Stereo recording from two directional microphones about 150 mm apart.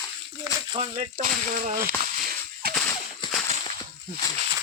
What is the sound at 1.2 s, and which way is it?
Speech, 70° right (ahead or behind).